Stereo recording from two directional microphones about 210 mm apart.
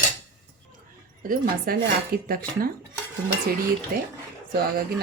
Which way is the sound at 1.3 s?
45° right (ahead or behind).